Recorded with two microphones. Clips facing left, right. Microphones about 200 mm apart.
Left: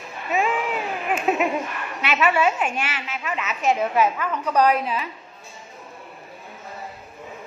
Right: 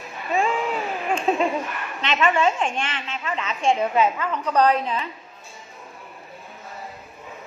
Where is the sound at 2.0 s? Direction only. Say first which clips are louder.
Even; 10° left (ahead or behind).